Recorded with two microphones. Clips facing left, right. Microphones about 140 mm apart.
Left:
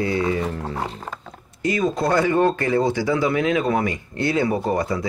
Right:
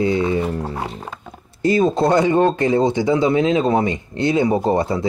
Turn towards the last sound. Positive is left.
turn(degrees=-25)  # may be behind; listen again after turning